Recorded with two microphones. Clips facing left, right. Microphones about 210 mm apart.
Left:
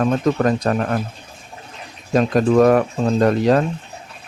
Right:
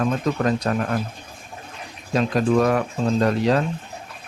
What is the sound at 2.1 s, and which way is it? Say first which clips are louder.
Speech: left 4 dB; 45° left (ahead or behind).